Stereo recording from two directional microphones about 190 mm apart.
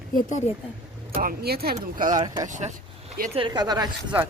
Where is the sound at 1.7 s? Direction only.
45° right (ahead or behind).